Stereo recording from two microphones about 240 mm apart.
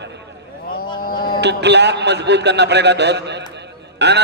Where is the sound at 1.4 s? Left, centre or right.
Right.